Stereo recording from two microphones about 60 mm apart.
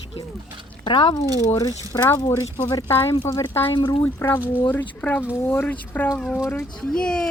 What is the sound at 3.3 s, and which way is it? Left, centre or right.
Speech, left.